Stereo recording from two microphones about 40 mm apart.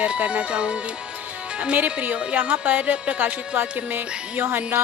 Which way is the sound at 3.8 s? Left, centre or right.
Right.